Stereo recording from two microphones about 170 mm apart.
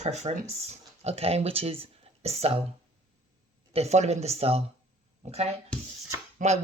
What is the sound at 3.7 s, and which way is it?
Speech, 40° right (ahead or behind).